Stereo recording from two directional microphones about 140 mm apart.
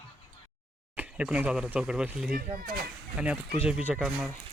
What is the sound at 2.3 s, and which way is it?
Speech, 90° right.